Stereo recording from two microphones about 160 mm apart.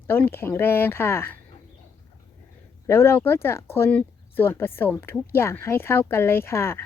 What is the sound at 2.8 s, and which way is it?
Speech, 15° left (ahead or behind).